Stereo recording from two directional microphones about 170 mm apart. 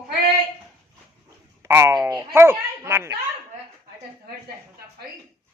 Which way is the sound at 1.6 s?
15° right (ahead or behind).